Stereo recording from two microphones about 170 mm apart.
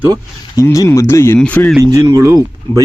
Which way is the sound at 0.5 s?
20° left (ahead or behind).